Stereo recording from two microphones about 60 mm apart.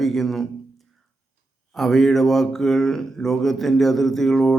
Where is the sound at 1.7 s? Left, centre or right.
Centre.